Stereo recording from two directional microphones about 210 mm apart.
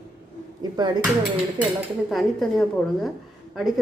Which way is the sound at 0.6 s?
20° right (ahead or behind).